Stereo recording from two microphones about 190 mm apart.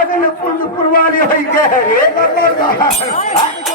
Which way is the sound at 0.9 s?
50° left (ahead or behind).